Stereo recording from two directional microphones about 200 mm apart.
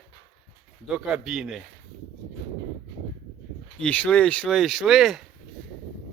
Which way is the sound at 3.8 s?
5° left (ahead or behind).